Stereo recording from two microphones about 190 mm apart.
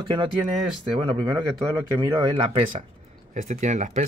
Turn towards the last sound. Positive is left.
turn(degrees=-40)  # may be behind; listen again after turning